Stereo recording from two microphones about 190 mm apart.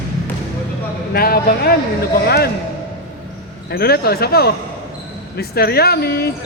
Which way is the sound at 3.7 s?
55° left (ahead or behind).